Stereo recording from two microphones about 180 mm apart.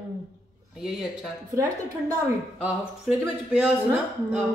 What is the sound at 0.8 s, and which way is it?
Speech, centre (ahead or behind).